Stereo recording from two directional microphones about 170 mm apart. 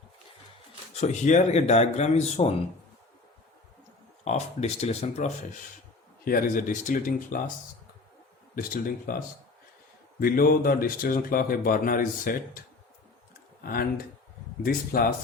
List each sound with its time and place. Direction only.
0.9 s speech: 45° left (ahead or behind)
4.2 s speech: 40° left (ahead or behind)
6.2 s speech: 55° left (ahead or behind)
8.5 s speech: 55° left (ahead or behind)
10.2 s speech: 55° left (ahead or behind)
14.6 s speech: 60° left (ahead or behind)